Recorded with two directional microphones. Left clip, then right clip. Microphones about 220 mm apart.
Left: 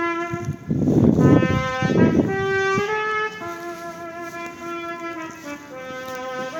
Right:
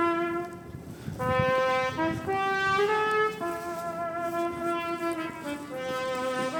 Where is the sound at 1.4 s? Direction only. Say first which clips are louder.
Left 1 dB; 45° left (ahead or behind).